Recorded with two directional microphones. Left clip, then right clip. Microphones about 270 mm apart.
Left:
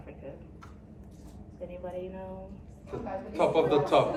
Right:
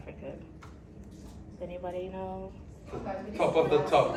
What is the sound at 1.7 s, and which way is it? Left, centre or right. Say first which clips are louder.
Speech: right 2 dB; centre.